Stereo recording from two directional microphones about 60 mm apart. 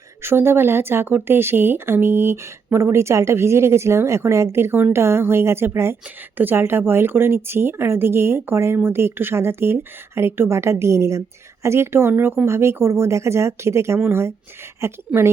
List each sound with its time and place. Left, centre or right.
0.2 s speech: right
6.3 s speech: right